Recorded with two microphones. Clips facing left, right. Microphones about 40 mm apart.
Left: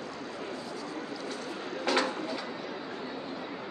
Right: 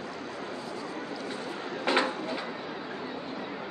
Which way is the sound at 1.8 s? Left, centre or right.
Right.